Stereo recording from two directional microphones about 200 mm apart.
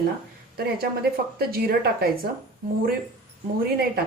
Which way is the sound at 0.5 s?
50° right (ahead or behind).